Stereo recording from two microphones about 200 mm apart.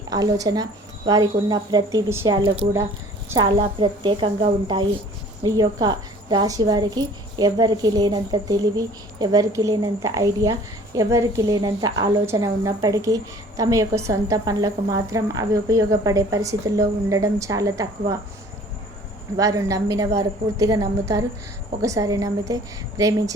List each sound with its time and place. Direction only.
0.1 s a woman's voice: 20° right (ahead or behind)
19.4 s a woman's voice: 15° right (ahead or behind)
21.8 s a woman's voice: 15° right (ahead or behind)